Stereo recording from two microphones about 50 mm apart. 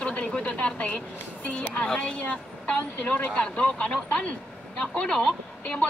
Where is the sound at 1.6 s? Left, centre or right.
Left.